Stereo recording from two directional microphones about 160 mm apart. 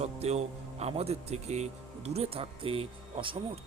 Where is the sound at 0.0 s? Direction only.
40° right (ahead or behind).